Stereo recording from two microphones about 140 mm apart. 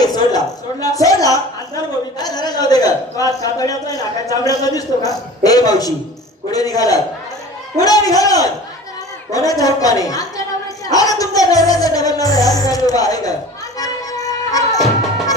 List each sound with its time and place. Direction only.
0.0 s a sound: 30° left (ahead or behind)
6.5 s a woman's voice: 25° left (ahead or behind)
13.7 s music: 25° left (ahead or behind)